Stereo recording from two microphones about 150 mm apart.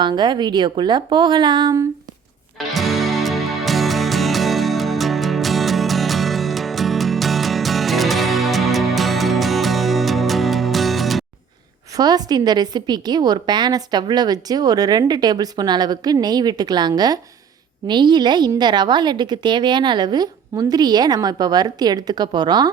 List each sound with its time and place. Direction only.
0.0 s a woman's voice: 30° right (ahead or behind)
2.7 s music: centre (ahead or behind)
11.9 s a woman's voice: 25° right (ahead or behind)